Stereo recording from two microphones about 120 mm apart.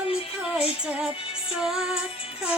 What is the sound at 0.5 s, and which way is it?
Music, 5° right (ahead or behind).